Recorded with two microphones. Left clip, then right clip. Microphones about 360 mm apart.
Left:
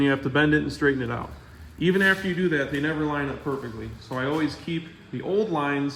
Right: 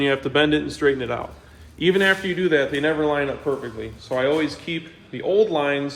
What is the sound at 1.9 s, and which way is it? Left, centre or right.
Speech, right.